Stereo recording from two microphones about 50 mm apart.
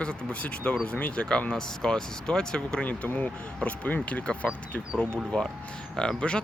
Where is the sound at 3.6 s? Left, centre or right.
Left.